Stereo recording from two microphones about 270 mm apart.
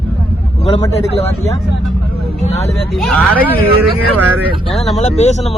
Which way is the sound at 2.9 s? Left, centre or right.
Centre.